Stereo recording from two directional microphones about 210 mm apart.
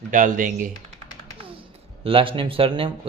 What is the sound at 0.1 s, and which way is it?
Speech, 40° right (ahead or behind).